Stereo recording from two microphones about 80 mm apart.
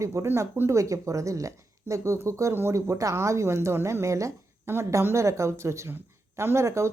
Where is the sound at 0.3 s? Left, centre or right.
Right.